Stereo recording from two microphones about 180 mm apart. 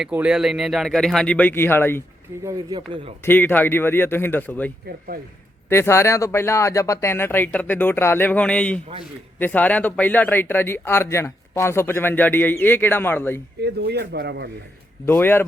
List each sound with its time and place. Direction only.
0.0 s speech: 5° right (ahead or behind); by 2.0 s 10° left (ahead or behind)
2.4 s speech: 20° right (ahead or behind)
3.2 s speech: 10° left (ahead or behind)
13.7 s a man's voice: 65° right (ahead or behind)
15.0 s speech: 10° left (ahead or behind)